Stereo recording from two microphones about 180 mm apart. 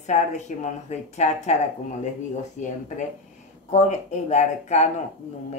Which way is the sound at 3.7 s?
40° left (ahead or behind).